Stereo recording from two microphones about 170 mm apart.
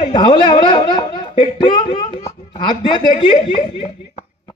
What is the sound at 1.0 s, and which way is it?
Speech, 30° left (ahead or behind).